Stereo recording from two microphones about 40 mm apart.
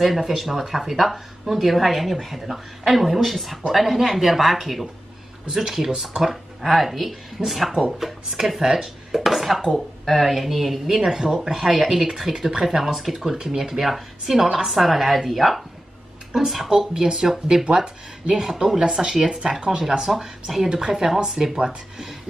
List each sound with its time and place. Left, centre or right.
0.0 s speech: centre
20.2 s speech: centre
21.5 s speech: right